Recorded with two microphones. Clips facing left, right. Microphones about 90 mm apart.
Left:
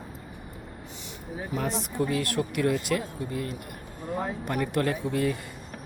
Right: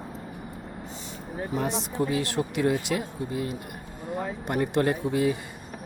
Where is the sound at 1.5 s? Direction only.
20° right (ahead or behind).